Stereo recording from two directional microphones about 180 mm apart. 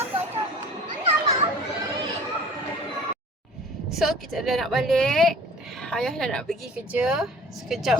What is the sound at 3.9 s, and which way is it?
A woman's voice, centre (ahead or behind).